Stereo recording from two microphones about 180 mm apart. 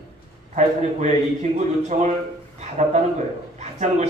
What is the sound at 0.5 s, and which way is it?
A man's voice, 40° right (ahead or behind).